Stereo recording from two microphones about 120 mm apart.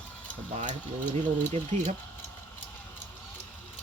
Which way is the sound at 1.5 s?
70° right (ahead or behind).